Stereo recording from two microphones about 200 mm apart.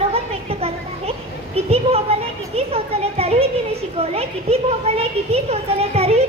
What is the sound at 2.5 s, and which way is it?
A woman's voice, 30° right (ahead or behind).